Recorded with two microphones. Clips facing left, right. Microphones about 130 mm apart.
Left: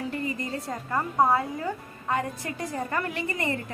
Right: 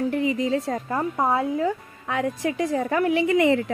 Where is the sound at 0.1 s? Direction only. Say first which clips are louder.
Right 8 dB; 90° right.